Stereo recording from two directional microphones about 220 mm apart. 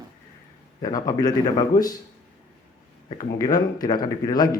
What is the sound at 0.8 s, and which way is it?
Speech, 20° left (ahead or behind).